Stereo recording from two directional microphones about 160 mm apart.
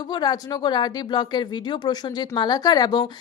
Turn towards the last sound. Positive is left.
turn(degrees=25)  # may be behind; listen again after turning